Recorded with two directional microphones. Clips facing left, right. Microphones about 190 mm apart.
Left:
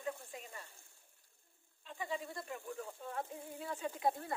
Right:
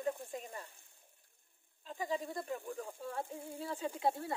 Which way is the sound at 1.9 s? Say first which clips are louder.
Right 4 dB; 40° right (ahead or behind).